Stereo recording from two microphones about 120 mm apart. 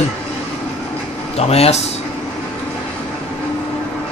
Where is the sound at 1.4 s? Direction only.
60° left (ahead or behind).